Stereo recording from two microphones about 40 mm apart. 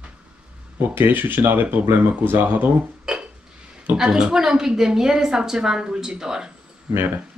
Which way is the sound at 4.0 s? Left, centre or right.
Centre.